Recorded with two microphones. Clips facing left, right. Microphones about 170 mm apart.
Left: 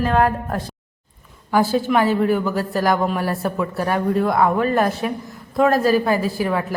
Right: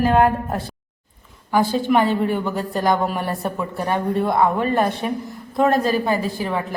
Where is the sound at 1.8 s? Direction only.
5° left (ahead or behind).